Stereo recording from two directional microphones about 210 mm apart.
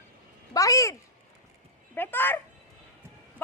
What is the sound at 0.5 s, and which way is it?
Speech, 15° left (ahead or behind).